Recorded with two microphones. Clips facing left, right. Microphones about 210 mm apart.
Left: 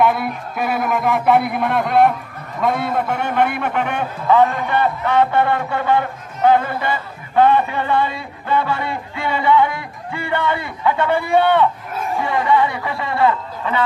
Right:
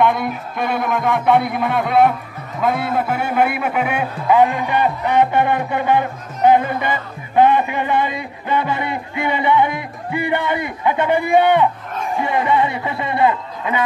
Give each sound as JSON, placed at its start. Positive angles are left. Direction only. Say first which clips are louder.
{"t": 0.0, "sound": "a man's voice", "louder": "even", "side_deg": 5}